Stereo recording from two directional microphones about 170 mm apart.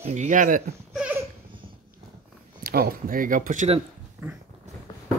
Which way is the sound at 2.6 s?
65° right (ahead or behind).